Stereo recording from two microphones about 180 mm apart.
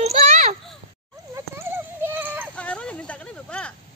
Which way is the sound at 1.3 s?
15° right (ahead or behind).